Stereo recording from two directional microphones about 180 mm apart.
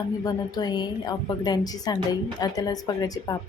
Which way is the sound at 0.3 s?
20° left (ahead or behind).